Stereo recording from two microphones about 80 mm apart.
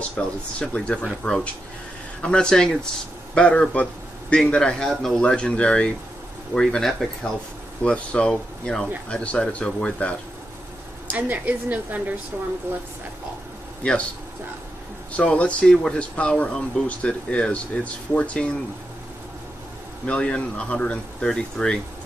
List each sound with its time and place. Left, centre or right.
0.0 s speech: centre
11.1 s a woman's voice: right
15.1 s speech: centre
20.1 s speech: centre